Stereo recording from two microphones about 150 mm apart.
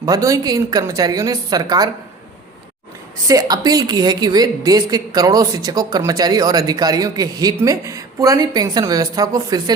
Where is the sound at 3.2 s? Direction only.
25° right (ahead or behind).